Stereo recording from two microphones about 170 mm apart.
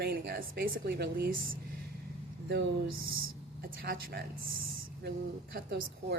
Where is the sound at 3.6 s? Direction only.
60° right (ahead or behind).